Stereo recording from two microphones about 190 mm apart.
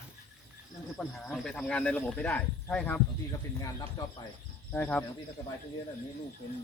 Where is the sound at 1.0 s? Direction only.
5° left (ahead or behind).